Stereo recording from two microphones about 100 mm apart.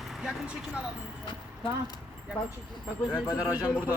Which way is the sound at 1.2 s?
50° left (ahead or behind).